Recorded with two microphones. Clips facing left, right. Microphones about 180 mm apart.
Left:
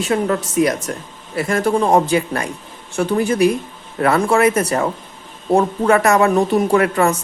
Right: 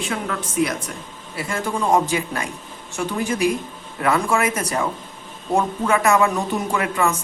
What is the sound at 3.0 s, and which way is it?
Speech, 55° left (ahead or behind).